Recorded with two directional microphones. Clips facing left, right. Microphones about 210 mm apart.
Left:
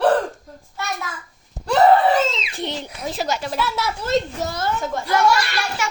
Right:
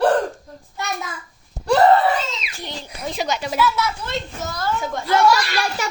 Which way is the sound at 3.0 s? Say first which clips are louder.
Right 1 dB; centre (ahead or behind).